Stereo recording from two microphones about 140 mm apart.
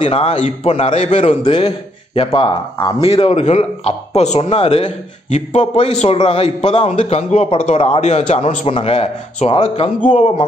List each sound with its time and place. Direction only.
0.0 s speech: 45° left (ahead or behind)
3.0 s speech: 45° left (ahead or behind)
9.9 s speech: 60° left (ahead or behind)